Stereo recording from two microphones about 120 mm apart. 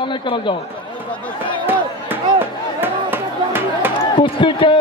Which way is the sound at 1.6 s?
15° right (ahead or behind).